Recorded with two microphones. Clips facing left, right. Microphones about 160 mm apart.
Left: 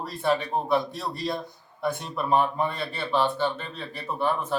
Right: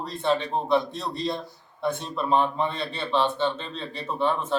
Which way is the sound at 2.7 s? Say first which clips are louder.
Right 1 dB; 25° right (ahead or behind).